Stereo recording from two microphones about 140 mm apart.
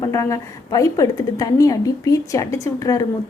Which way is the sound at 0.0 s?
20° left (ahead or behind).